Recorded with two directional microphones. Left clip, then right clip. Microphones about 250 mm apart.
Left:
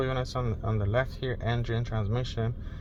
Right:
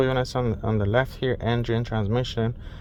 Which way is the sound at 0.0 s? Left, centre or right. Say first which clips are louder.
Right 7 dB; right.